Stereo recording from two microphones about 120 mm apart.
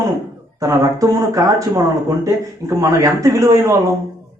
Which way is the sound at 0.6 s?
25° right (ahead or behind).